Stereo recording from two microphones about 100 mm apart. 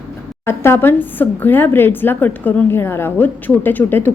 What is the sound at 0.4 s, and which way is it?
A woman's voice, 25° left (ahead or behind).